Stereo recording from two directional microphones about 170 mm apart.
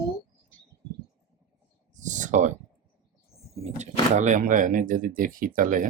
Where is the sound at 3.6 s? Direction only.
45° right (ahead or behind).